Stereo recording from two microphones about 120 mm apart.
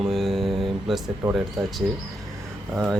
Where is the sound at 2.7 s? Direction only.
Centre (ahead or behind).